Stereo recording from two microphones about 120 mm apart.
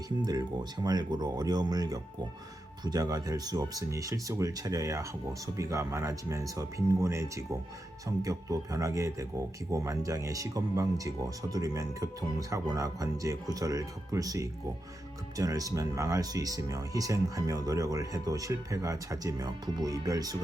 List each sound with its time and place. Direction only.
0.2 s speech: 35° right (ahead or behind)